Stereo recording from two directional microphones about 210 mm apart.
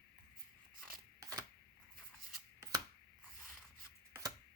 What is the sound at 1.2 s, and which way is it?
Shuffling cards, 15° right (ahead or behind).